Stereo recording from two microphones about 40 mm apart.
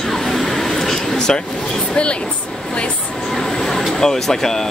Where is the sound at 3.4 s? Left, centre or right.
Centre.